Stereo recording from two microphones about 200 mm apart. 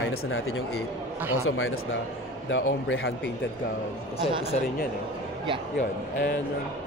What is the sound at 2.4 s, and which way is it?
Speech, 75° left (ahead or behind).